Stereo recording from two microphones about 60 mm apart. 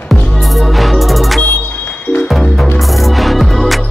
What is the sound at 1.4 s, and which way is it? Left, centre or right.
Music, left.